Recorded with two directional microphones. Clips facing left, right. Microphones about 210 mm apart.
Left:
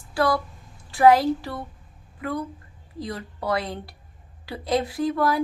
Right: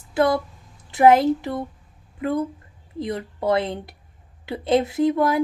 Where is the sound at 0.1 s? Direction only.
20° right (ahead or behind).